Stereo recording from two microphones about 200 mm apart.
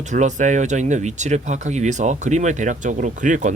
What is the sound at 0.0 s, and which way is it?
Speech, 35° right (ahead or behind).